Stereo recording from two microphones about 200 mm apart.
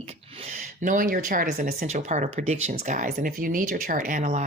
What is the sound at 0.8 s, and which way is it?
Speech, 40° right (ahead or behind).